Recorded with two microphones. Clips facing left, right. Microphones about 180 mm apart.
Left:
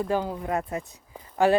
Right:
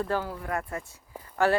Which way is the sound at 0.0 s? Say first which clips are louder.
Left 3 dB; 15° left (ahead or behind).